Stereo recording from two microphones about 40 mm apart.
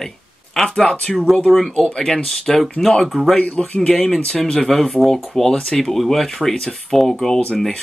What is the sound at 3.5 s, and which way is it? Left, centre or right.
Speech, left.